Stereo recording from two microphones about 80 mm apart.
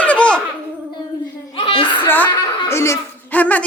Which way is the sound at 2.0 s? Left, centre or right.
Left.